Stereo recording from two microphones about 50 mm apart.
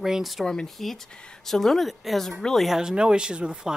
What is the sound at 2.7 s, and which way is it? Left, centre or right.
Speech, centre.